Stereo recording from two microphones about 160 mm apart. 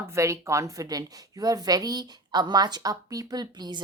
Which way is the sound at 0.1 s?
20° right (ahead or behind).